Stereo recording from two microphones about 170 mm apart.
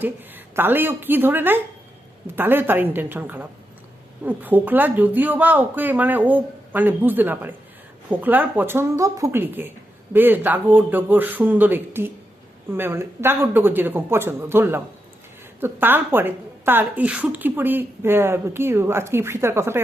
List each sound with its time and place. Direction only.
0.0 s a woman's voice: 10° right (ahead or behind)